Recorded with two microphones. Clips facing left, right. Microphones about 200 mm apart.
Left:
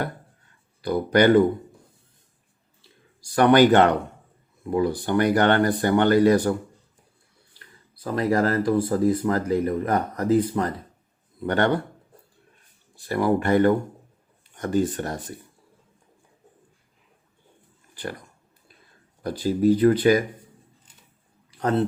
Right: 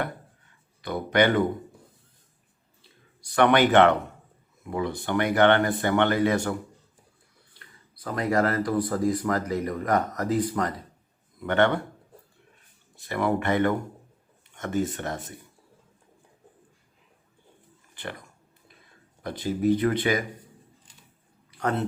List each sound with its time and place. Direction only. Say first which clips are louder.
0.9 s speech: left 5 dB; 35° left (ahead or behind)
3.2 s speech: left 4 dB; 35° left (ahead or behind)
8.0 s a man's voice: left 3 dB; 30° left (ahead or behind)
13.1 s speech: left 4 dB; 35° left (ahead or behind)
19.4 s speech: left 5 dB; 35° left (ahead or behind)
21.6 s speech: left 5 dB; 30° left (ahead or behind)